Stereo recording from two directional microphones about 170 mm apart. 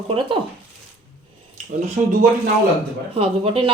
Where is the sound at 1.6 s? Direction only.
40° right (ahead or behind).